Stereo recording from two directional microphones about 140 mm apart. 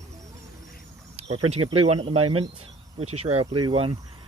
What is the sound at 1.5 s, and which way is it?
Speech, 45° right (ahead or behind).